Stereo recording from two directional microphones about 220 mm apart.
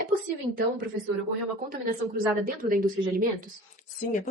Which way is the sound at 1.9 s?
40° right (ahead or behind).